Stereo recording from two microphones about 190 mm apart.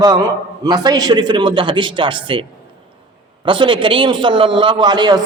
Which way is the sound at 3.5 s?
25° right (ahead or behind).